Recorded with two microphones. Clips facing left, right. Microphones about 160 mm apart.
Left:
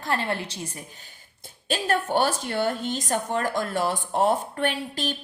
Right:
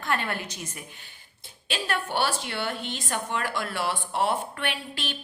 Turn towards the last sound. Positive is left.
turn(degrees=40)  # may be behind; listen again after turning